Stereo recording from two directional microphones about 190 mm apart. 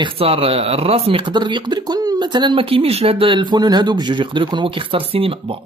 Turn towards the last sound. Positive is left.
turn(degrees=-30)  # may be behind; listen again after turning